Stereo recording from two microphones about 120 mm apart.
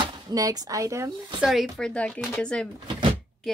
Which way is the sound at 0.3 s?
30° right (ahead or behind).